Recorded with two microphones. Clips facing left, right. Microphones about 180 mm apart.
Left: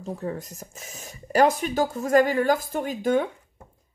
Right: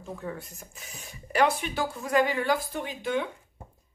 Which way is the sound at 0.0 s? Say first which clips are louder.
Left 5 dB; 35° left (ahead or behind).